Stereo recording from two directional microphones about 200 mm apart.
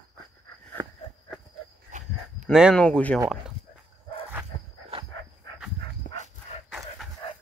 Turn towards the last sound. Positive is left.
turn(degrees=25)  # may be behind; listen again after turning